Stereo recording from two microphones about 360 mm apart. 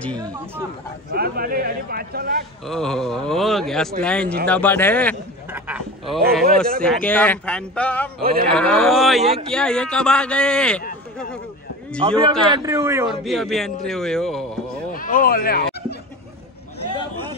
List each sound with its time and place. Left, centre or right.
0.2 s speech: centre
1.1 s a man's voice: right
2.6 s speech: centre
8.2 s a man's voice: right
8.5 s speech: centre
12.0 s speech: centre
14.9 s a sound: left